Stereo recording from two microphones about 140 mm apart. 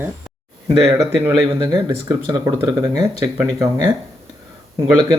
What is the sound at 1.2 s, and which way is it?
Speech, 25° right (ahead or behind).